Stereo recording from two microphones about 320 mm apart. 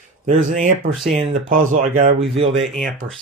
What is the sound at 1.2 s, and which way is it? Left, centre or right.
Speech, right.